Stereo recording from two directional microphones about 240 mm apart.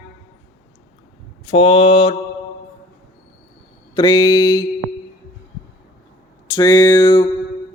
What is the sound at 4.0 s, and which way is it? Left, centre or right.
Speech, left.